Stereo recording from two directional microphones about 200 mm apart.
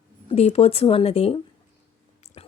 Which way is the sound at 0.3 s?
30° left (ahead or behind).